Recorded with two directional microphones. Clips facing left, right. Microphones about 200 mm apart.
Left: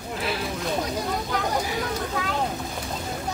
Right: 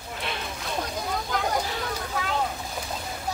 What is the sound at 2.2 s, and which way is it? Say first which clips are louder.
Boat: right 1 dB; centre (ahead or behind).